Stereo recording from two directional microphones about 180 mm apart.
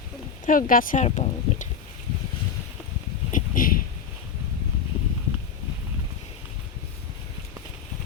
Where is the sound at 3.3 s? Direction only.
50° left (ahead or behind).